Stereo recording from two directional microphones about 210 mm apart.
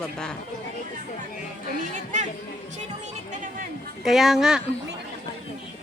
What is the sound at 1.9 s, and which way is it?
Speech, 35° right (ahead or behind).